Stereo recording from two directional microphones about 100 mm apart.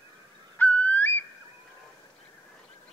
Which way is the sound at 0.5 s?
15° left (ahead or behind).